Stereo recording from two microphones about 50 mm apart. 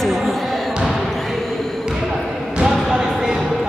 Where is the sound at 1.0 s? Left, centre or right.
Centre.